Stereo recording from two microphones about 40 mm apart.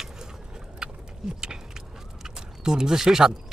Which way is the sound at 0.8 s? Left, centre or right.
Right.